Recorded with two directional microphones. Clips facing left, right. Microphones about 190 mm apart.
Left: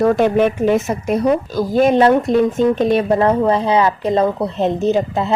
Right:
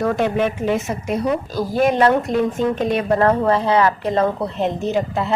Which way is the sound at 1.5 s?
25° left (ahead or behind).